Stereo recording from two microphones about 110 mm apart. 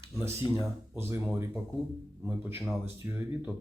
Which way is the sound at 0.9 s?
25° right (ahead or behind).